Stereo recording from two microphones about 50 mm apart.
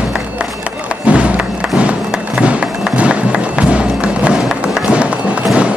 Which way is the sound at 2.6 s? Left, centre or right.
Centre.